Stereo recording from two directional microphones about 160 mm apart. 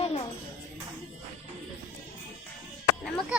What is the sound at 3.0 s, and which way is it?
Speech, centre (ahead or behind).